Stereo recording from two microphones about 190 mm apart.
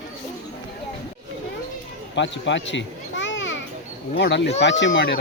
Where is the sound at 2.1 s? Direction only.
70° left (ahead or behind).